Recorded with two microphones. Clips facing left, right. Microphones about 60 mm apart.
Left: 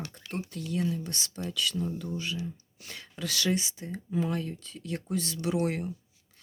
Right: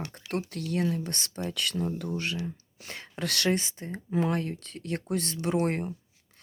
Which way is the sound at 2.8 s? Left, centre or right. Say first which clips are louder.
Right 4 dB; right.